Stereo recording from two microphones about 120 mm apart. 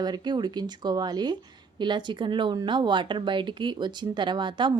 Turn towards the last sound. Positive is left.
turn(degrees=-40)  # may be behind; listen again after turning